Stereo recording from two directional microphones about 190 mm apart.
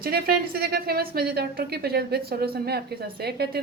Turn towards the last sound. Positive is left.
turn(degrees=-55)  # may be behind; listen again after turning